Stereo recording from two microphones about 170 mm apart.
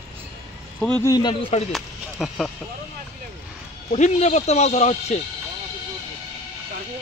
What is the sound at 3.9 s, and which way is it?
Speech, 45° left (ahead or behind).